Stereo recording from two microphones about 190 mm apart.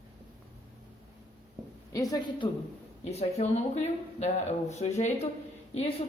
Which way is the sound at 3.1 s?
35° left (ahead or behind).